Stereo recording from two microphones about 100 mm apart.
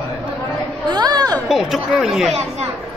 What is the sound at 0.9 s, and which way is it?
Chatter, 45° right (ahead or behind).